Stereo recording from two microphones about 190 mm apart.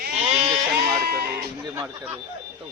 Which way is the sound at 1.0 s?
50° right (ahead or behind).